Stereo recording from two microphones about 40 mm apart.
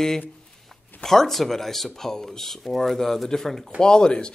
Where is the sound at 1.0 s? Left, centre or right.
Centre.